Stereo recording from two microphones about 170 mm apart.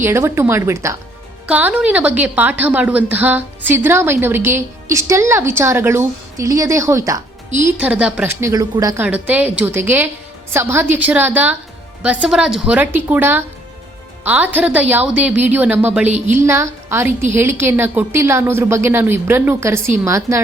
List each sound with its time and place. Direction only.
0.0 s a woman's voice: 15° right (ahead or behind)
8.4 s speech: 20° right (ahead or behind)
9.0 s a woman's voice: 10° right (ahead or behind)
16.0 s speech: 40° right (ahead or behind)
16.3 s a woman's voice: 15° right (ahead or behind)